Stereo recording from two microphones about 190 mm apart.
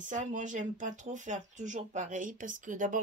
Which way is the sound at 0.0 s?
40° right (ahead or behind).